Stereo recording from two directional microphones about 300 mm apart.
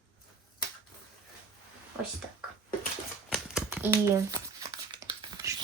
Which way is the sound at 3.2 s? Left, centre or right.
Centre.